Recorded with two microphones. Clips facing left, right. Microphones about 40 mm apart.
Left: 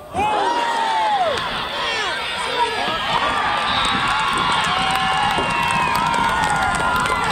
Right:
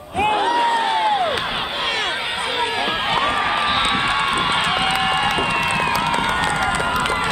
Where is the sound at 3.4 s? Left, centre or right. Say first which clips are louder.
Even; centre.